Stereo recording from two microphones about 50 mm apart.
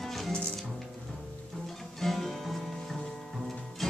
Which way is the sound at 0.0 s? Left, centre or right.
Centre.